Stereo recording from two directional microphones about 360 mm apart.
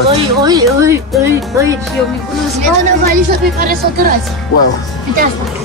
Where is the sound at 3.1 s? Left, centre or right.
Right.